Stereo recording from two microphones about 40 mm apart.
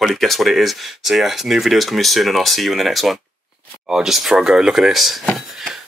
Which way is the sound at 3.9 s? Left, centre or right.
Centre.